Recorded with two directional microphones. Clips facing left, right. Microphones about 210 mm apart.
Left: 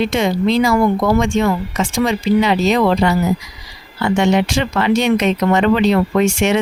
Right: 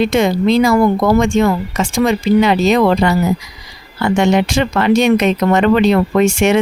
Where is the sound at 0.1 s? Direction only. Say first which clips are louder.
Right 3 dB; 45° right (ahead or behind).